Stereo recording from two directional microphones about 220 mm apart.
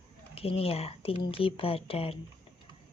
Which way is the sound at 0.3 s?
25° left (ahead or behind).